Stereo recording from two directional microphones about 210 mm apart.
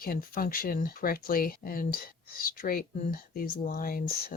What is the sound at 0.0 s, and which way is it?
Speech, 45° left (ahead or behind).